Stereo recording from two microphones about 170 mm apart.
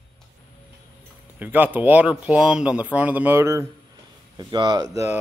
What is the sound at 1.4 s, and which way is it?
Speech, 10° right (ahead or behind).